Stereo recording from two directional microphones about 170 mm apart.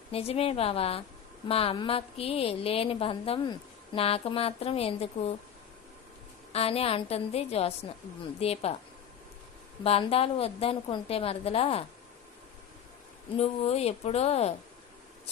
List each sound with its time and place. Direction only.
0.1 s a woman's voice: 35° left (ahead or behind)
6.5 s a woman's voice: 35° left (ahead or behind)
9.8 s a woman's voice: 35° left (ahead or behind)
13.3 s a woman's voice: 40° left (ahead or behind)